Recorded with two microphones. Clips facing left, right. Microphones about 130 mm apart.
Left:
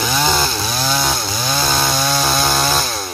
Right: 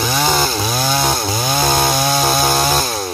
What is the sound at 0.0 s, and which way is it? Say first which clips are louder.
Chainsaw: right 1 dB; 5° right (ahead or behind).